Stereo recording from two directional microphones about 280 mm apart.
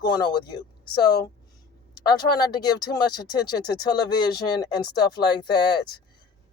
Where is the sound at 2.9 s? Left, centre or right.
Centre.